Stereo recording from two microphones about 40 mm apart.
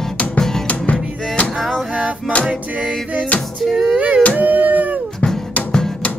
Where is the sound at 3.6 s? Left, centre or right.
Centre.